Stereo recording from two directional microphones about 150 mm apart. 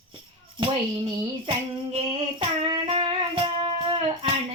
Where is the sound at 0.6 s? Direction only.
35° right (ahead or behind).